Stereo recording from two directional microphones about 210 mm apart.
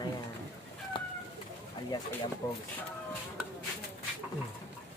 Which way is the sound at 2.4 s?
20° left (ahead or behind).